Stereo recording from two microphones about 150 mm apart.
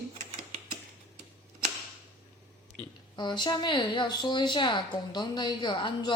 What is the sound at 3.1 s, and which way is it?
A woman's voice, 30° left (ahead or behind).